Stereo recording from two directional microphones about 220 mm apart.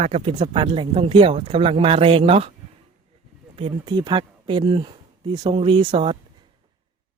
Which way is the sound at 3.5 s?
25° right (ahead or behind).